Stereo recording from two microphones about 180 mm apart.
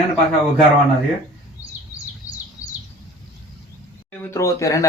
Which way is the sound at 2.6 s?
10° right (ahead or behind).